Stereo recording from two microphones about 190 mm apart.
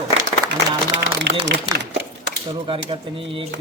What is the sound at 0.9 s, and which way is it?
Speech, 70° right (ahead or behind).